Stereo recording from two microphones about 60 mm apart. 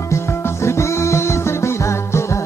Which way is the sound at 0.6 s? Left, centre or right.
Left.